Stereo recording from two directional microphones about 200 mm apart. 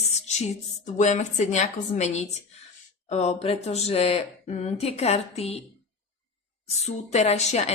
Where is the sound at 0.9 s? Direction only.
35° left (ahead or behind).